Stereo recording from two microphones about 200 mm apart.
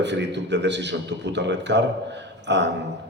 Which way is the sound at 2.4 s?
60° right (ahead or behind).